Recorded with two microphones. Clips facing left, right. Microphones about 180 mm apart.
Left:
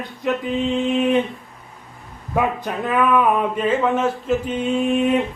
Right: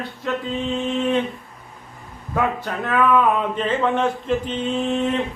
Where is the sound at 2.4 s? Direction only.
15° left (ahead or behind).